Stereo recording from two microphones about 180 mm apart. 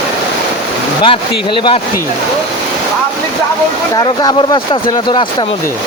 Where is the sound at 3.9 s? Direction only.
25° left (ahead or behind).